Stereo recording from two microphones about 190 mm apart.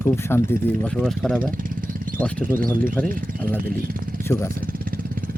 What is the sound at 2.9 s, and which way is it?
Speech, 10° left (ahead or behind).